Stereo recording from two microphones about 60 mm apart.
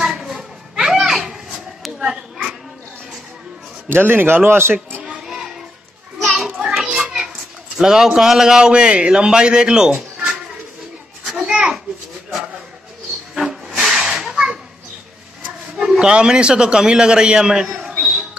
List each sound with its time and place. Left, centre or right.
0.0 s children playing: centre
2.0 s a sound: centre
3.9 s a man's voice: right
5.0 s child singing: centre
6.2 s children playing: centre
7.7 s a man's voice: centre
11.2 s children playing: centre
13.3 s hiss: centre
15.8 s a man's voice: centre